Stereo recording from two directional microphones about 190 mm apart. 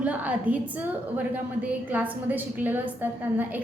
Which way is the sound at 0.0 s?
10° right (ahead or behind).